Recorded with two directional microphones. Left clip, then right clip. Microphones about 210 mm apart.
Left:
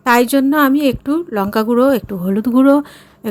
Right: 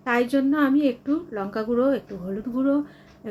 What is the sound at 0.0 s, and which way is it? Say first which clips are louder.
A woman's voice: left 10 dB; 60° left (ahead or behind).